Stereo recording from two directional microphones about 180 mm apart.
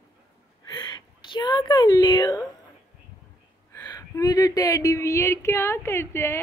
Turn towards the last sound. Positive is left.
turn(degrees=15)  # may be behind; listen again after turning